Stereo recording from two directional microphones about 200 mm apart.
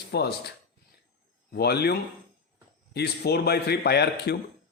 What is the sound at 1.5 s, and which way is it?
Speech, 55° left (ahead or behind).